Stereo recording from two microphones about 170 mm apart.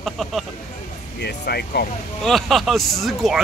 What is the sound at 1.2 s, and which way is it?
Speech, 75° left (ahead or behind).